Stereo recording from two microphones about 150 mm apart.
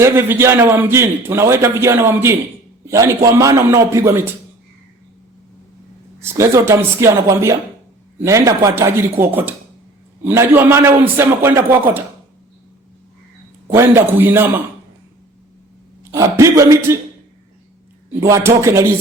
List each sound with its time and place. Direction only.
0.0 s a man's voice: 15° right (ahead or behind)
6.2 s a man's voice: 20° right (ahead or behind)
13.7 s a man's voice: 15° right (ahead or behind)
16.1 s speech: 20° right (ahead or behind)
18.2 s speech: 20° right (ahead or behind)